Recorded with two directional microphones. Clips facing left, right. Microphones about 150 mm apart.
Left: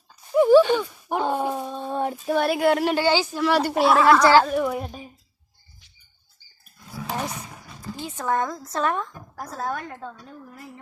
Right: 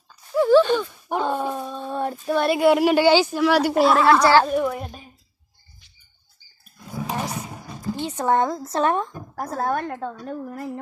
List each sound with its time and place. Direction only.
0.3 s a sound: 15° left (ahead or behind)
2.2 s speech: 5° left (ahead or behind); by 3.2 s 15° right (ahead or behind)
3.3 s speech: 5° right (ahead or behind)
6.9 s roar: 25° right (ahead or behind)
8.1 s a woman's voice: 30° right (ahead or behind)
9.1 s a woman's voice: 50° right (ahead or behind)